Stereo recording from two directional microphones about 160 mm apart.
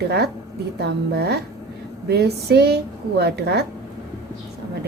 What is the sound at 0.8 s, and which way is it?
A woman's voice, 85° right.